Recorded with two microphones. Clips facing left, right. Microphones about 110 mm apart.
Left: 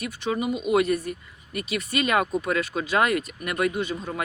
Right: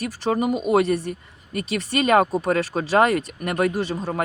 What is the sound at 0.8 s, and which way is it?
Speech, 30° right (ahead or behind).